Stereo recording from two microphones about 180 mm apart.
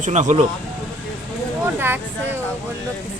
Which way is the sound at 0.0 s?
40° right (ahead or behind).